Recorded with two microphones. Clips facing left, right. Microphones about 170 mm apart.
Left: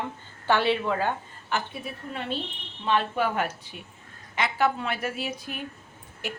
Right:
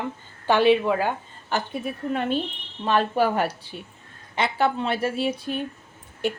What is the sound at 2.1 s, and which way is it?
Speech, 55° right (ahead or behind).